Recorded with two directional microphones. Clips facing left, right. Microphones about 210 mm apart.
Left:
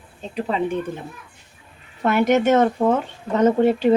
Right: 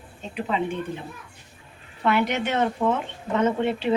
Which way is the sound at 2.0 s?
45° left (ahead or behind).